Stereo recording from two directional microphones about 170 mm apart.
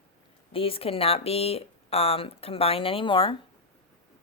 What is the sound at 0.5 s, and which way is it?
Speech, 35° left (ahead or behind).